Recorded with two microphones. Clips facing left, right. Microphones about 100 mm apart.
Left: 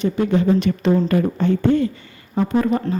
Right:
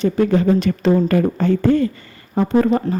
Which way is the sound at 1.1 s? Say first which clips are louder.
Right 2 dB; 50° right (ahead or behind).